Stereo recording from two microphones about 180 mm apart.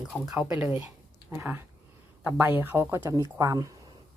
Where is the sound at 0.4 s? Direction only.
20° right (ahead or behind).